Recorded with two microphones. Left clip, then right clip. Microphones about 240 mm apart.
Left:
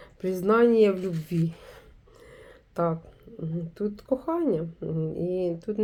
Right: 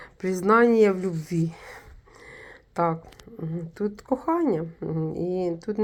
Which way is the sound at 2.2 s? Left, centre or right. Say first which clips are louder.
Right 5 dB; right.